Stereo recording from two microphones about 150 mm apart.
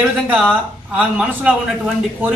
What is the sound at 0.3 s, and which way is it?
Speech, 10° right (ahead or behind).